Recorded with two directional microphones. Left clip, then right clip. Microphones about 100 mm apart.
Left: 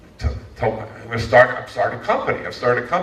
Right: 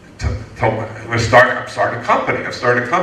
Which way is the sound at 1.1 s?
50° right (ahead or behind).